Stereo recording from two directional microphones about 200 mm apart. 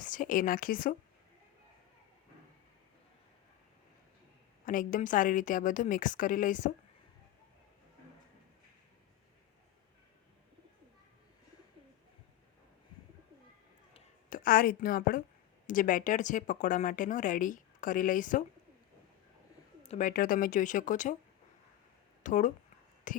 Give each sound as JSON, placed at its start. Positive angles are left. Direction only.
{"t": 0.0, "sound": "speech", "side_deg": 40}
{"t": 4.6, "sound": "speech", "side_deg": 45}
{"t": 14.3, "sound": "a woman's voice", "side_deg": 45}
{"t": 19.9, "sound": "speech", "side_deg": 40}
{"t": 22.2, "sound": "speech", "side_deg": 40}